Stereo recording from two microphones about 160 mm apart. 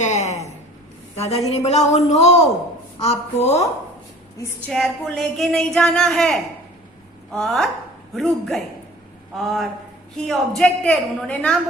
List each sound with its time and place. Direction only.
0.0 s a sound: 45° left (ahead or behind)
1.1 s a woman's voice: 40° left (ahead or behind)
4.7 s speech: centre (ahead or behind)